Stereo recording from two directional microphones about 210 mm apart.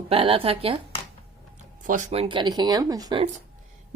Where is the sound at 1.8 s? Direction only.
35° right (ahead or behind); by 3.3 s 20° right (ahead or behind).